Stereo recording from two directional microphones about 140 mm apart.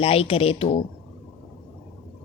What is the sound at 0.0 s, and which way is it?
Speech, 45° left (ahead or behind).